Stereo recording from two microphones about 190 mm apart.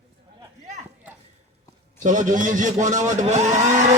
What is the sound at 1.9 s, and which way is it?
Speech, 40° right (ahead or behind).